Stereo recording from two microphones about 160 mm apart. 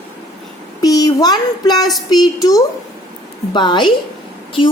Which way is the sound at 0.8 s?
20° left (ahead or behind).